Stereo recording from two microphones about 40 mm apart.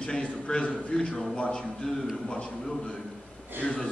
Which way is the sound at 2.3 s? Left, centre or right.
Left.